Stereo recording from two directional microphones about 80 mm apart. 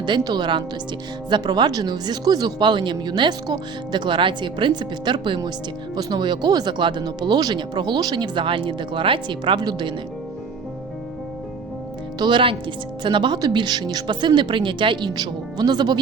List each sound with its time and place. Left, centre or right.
0.3 s speech: right
2.6 s speech: right
3.9 s speech: right
6.0 s speech: right
12.2 s speech: right